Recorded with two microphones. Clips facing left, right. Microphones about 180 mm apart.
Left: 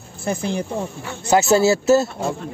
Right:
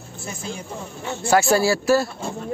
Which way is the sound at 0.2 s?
65° left (ahead or behind).